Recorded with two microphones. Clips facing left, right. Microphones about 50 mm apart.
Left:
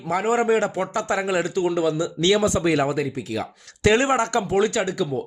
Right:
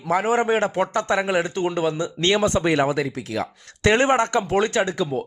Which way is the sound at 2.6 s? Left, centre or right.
Right.